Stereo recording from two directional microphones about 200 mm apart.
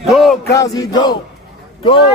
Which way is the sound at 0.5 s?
15° left (ahead or behind).